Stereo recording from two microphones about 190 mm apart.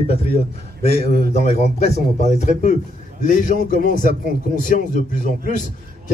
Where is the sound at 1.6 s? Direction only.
35° left (ahead or behind).